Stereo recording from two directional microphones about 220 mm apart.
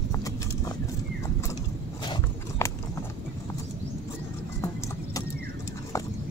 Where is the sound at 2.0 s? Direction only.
20° left (ahead or behind).